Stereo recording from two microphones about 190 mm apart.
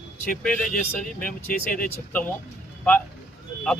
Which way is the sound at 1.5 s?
45° left (ahead or behind).